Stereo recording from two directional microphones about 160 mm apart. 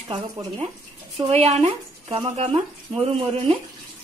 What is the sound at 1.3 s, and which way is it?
Speech, 40° right (ahead or behind).